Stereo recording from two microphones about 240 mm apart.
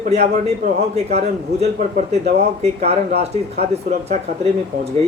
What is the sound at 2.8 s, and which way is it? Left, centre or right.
A man's voice, right.